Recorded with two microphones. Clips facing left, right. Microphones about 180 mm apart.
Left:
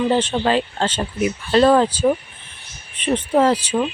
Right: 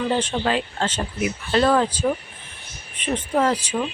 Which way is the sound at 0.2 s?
30° left (ahead or behind).